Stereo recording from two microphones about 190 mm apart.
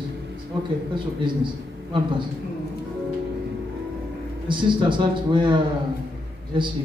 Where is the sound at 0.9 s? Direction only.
25° right (ahead or behind).